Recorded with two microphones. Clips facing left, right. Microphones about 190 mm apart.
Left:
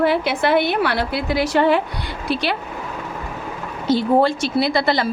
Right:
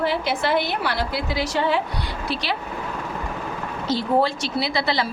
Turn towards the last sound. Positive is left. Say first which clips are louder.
# left 5 dB
turn(degrees=50)  # may be behind; listen again after turning